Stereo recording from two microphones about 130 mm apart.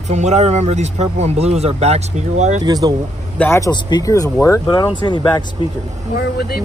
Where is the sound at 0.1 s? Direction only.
60° right (ahead or behind).